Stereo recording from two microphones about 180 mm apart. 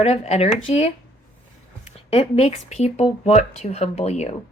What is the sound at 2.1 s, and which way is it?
Speech, 35° left (ahead or behind).